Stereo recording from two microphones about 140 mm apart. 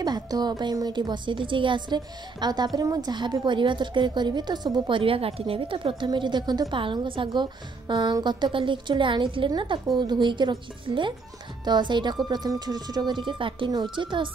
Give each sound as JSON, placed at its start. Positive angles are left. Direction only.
{"t": 0.0, "sound": "a woman's voice", "side_deg": -30}